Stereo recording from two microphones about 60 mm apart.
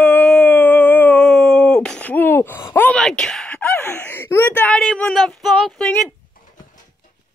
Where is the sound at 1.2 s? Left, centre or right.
Centre.